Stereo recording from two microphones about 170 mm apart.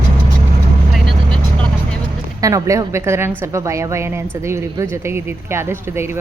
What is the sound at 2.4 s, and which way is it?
Speech, 20° right (ahead or behind).